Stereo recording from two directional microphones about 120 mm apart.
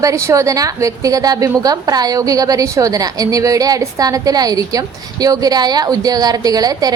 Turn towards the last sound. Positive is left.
turn(degrees=-30)  # may be behind; listen again after turning